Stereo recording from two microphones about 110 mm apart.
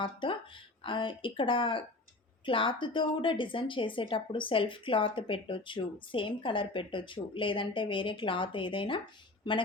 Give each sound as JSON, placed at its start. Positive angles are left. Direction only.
{"t": 0.0, "sound": "speech", "side_deg": 50}